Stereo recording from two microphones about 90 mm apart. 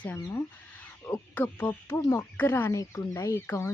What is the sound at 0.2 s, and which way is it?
Speech, 30° left (ahead or behind).